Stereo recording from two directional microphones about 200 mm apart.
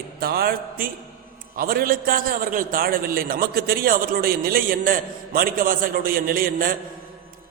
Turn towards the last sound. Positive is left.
turn(degrees=-45)  # may be behind; listen again after turning